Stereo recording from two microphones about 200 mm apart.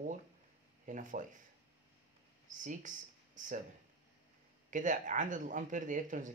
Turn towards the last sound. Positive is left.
turn(degrees=-40)  # may be behind; listen again after turning